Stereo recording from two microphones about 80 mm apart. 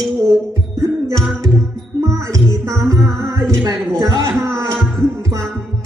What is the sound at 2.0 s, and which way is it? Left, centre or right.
Music, right.